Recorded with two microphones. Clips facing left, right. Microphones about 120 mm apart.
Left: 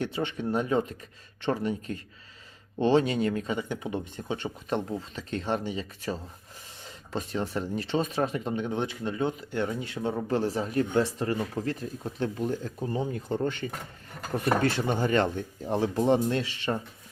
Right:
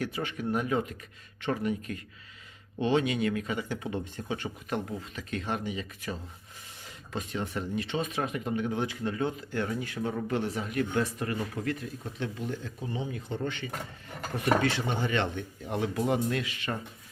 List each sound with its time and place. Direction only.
0.0 s speech: 25° left (ahead or behind)